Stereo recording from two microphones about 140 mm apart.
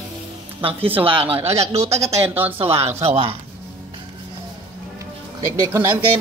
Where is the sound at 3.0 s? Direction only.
45° right (ahead or behind).